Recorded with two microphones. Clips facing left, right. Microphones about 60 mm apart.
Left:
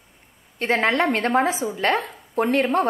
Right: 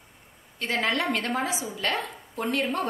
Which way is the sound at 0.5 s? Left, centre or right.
Left.